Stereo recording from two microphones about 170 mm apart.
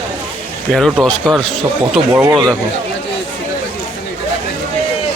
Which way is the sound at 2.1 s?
20° right (ahead or behind).